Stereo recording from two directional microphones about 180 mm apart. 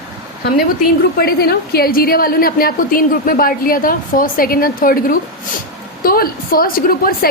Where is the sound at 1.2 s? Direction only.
60° left (ahead or behind).